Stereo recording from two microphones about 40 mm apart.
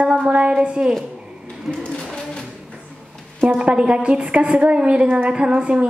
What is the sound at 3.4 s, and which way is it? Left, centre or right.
A woman's voice, right.